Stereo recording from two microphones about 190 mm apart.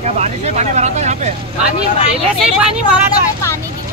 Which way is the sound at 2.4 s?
5° right (ahead or behind).